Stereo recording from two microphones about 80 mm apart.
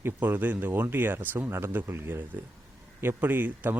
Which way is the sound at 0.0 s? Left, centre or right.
Right.